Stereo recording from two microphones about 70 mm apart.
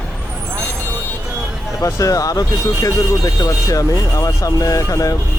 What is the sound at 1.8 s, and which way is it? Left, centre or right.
Speech, left.